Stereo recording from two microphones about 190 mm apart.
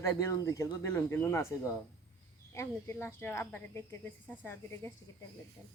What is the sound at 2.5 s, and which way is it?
A woman's voice, 15° left (ahead or behind).